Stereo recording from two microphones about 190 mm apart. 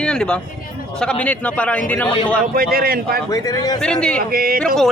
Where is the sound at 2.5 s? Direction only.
50° right (ahead or behind).